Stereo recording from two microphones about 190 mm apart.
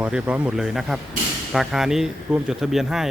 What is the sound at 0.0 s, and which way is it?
Speech, 5° right (ahead or behind).